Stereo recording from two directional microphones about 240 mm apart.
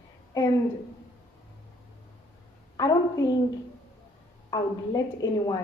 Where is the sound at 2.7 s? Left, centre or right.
Centre.